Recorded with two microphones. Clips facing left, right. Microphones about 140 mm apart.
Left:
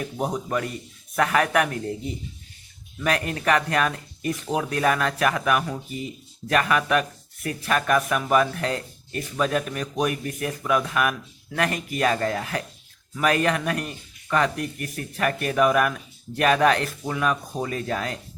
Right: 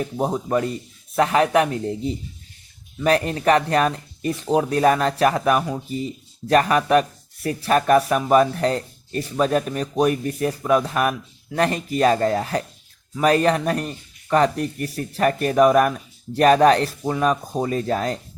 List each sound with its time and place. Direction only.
0.0 s speech: 30° right (ahead or behind)
3.0 s speech: 30° right (ahead or behind)